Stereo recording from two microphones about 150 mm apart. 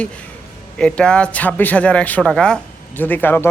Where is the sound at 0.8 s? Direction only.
5° left (ahead or behind).